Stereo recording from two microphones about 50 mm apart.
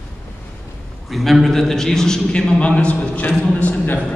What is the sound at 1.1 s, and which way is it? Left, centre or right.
A man's voice, centre.